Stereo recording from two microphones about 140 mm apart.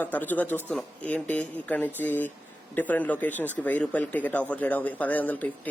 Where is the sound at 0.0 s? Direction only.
15° left (ahead or behind).